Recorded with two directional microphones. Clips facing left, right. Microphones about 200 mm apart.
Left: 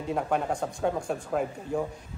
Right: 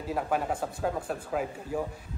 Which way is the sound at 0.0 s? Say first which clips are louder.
Left 2 dB; 5° right (ahead or behind).